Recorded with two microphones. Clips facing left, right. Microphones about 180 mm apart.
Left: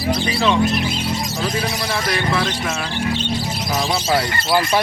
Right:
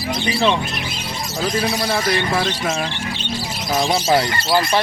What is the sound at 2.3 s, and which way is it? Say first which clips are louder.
Speech: right 1 dB; 30° right (ahead or behind).